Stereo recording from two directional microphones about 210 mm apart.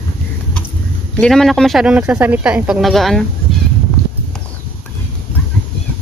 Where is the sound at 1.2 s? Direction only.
Centre (ahead or behind).